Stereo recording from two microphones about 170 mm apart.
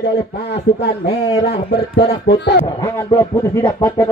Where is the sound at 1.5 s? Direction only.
70° left (ahead or behind).